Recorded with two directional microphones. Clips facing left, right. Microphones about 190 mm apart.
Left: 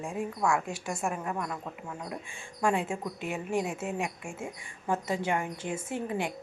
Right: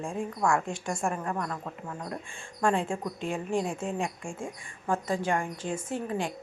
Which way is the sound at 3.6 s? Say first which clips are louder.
Right 1 dB; 5° left (ahead or behind).